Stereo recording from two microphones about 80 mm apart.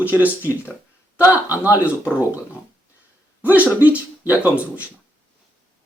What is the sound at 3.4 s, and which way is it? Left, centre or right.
Speech, right.